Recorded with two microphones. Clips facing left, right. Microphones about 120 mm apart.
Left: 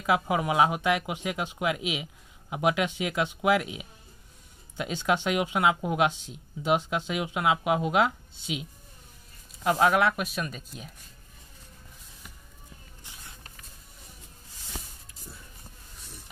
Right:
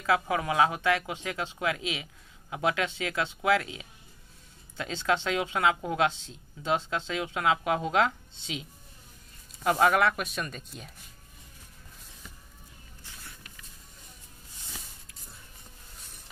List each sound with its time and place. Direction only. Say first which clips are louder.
0.0 s speech: left 1 dB; 15° left (ahead or behind)